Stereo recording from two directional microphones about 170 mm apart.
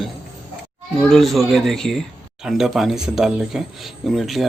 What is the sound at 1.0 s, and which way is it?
Speech, centre (ahead or behind).